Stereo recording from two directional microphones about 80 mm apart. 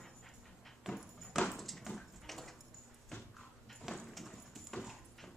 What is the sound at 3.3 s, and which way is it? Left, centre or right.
Dog, centre.